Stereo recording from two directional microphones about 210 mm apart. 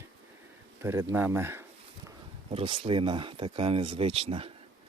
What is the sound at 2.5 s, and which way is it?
Speech, 25° right (ahead or behind).